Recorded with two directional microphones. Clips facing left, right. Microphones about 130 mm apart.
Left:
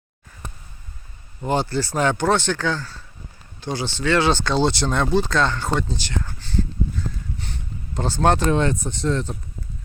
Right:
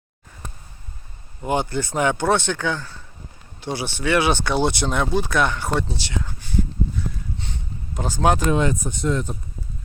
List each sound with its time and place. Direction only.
1.5 s speech: 20° right (ahead or behind)
7.9 s speech: 10° right (ahead or behind)